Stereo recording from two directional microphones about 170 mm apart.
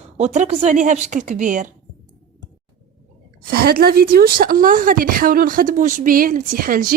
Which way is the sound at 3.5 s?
60° right (ahead or behind).